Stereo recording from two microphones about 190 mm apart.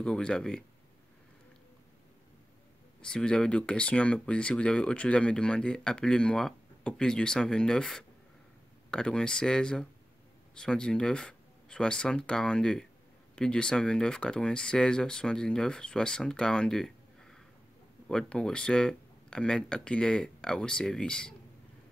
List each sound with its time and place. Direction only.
0.0 s speech: 5° left (ahead or behind)
3.0 s speech: 5° left (ahead or behind)